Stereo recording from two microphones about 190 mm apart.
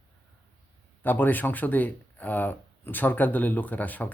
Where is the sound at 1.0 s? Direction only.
10° left (ahead or behind).